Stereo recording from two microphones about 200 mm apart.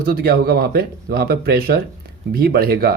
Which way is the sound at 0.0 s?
50° right (ahead or behind).